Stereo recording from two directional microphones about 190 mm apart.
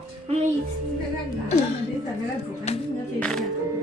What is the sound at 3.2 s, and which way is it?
Speech, 5° left (ahead or behind).